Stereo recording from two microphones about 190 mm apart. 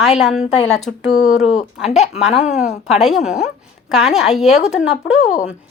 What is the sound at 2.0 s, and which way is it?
Speech, 35° left (ahead or behind).